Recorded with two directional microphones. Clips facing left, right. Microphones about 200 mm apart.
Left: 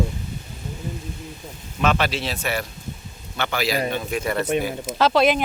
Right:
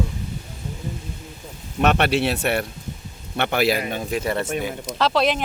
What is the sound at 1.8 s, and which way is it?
Speech, 65° right (ahead or behind).